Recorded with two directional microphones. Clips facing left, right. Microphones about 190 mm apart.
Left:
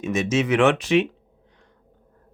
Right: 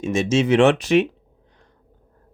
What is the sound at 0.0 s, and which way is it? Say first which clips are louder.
Speech: right 3 dB; 30° right (ahead or behind).